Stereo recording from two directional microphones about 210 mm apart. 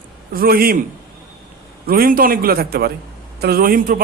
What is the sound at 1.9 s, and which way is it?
A man's voice, 45° right (ahead or behind).